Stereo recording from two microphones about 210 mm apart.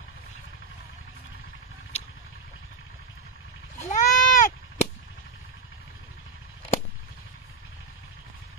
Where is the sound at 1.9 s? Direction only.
30° left (ahead or behind).